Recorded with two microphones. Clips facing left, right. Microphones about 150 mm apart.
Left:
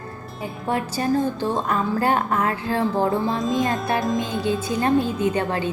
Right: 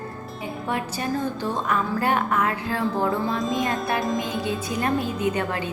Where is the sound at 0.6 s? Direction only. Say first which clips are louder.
Left 5 dB; 35° left (ahead or behind).